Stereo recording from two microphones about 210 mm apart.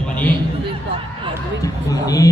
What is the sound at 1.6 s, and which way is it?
Speech, 15° left (ahead or behind).